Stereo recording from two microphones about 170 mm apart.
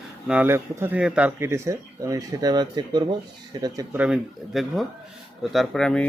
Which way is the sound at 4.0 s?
Centre (ahead or behind).